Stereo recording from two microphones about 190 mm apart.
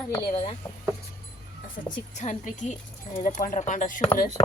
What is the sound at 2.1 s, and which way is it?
A woman's voice, 40° left (ahead or behind).